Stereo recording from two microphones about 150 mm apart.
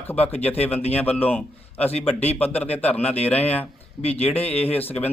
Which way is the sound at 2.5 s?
45° left (ahead or behind).